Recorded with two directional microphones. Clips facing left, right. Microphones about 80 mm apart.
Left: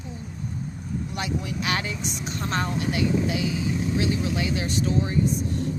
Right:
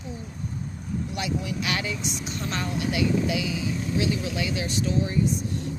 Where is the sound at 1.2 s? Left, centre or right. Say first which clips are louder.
Even; left.